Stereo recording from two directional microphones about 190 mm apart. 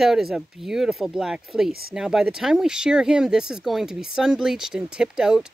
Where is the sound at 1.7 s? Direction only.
55° right (ahead or behind).